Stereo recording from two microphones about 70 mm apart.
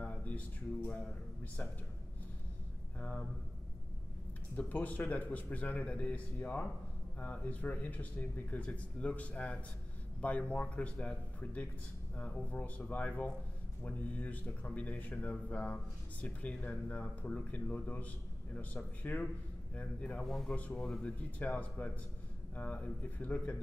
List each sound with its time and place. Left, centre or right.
0.0 s speech: left
3.0 s speech: left
4.6 s speech: left
20.2 s a man's voice: centre
20.5 s speech: centre